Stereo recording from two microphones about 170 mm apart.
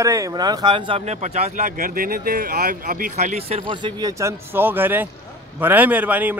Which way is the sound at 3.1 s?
40° right (ahead or behind).